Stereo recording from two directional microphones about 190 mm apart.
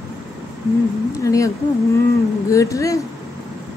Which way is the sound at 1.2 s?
15° left (ahead or behind).